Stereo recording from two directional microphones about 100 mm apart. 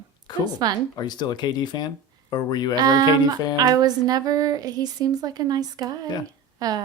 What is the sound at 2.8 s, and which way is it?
Speech, 40° right (ahead or behind).